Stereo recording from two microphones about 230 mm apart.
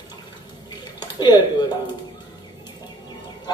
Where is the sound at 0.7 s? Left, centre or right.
Centre.